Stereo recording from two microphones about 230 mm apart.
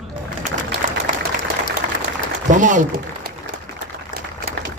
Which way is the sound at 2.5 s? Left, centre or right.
Right.